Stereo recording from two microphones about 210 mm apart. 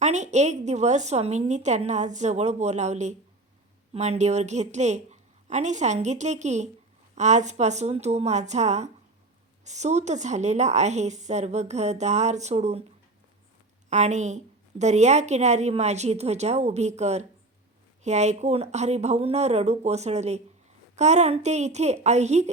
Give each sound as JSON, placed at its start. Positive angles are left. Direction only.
{"t": 0.0, "sound": "a woman's voice", "side_deg": -35}
{"t": 13.9, "sound": "a woman's voice", "side_deg": -35}